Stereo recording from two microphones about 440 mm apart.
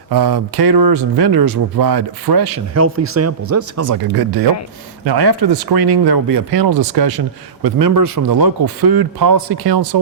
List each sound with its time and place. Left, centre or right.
0.1 s speech: right
2.7 s a man's voice: right